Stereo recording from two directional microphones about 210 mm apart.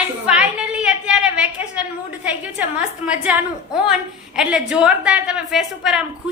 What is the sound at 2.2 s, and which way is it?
A woman's voice, 5° right (ahead or behind).